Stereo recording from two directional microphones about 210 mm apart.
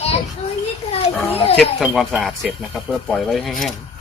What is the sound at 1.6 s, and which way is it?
Speech, centre (ahead or behind).